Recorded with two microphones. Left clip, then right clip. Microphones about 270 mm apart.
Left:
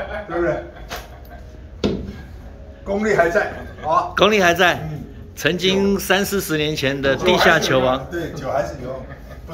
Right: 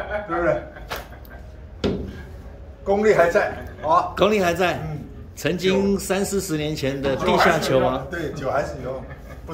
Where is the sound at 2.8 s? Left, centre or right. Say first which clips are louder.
Right 1 dB; right.